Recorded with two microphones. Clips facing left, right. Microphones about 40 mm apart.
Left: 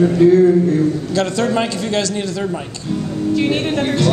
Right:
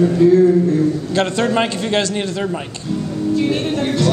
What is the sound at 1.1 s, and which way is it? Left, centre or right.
A man's voice, right.